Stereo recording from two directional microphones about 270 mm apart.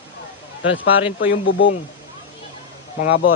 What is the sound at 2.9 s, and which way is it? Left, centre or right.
Speech, left.